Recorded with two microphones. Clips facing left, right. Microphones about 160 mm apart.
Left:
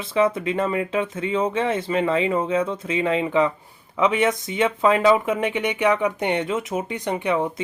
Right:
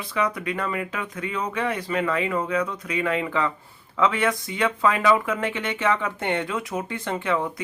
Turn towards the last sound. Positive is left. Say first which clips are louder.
# left 3 dB
turn(degrees=20)  # may be behind; listen again after turning